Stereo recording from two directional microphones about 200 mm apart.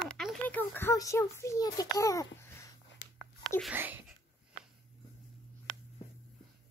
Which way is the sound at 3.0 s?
65° left (ahead or behind).